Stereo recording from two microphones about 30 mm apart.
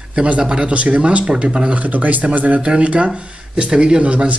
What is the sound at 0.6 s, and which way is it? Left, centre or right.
Speech, right.